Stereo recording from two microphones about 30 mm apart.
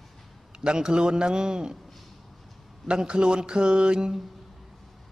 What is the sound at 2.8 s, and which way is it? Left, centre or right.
A man's voice, right.